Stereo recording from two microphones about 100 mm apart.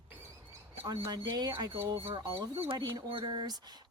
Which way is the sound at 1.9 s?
60° right (ahead or behind).